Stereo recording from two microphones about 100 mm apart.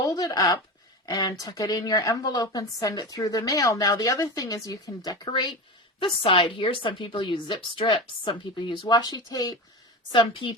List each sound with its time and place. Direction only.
0.0 s a sound: 35° left (ahead or behind)
1.0 s a woman's voice: 40° left (ahead or behind)
5.3 s speech: 50° left (ahead or behind)
6.0 s a woman's voice: 65° left (ahead or behind); by 9.6 s 40° left (ahead or behind)
10.1 s a woman's voice: 55° left (ahead or behind)